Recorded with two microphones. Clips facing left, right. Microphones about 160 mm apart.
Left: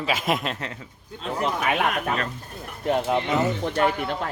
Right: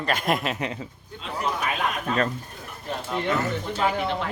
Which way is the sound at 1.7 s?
65° left (ahead or behind).